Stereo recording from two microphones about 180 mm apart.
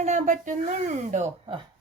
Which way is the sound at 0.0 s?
40° right (ahead or behind).